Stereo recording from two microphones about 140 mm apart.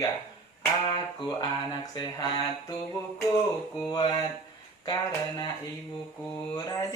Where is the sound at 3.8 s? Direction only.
30° left (ahead or behind).